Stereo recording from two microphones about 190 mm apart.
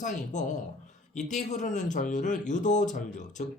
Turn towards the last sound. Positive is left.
turn(degrees=40)  # may be behind; listen again after turning